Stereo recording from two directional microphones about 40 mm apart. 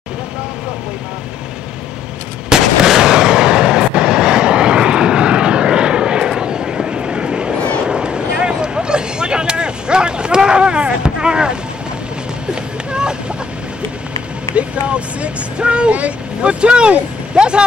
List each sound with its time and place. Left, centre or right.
2.8 s vehicle: centre
7.8 s a sound: right
14.5 s vehicle: right